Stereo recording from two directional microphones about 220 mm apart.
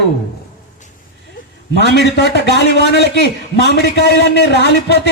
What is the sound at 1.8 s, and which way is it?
A man's voice, 50° left (ahead or behind).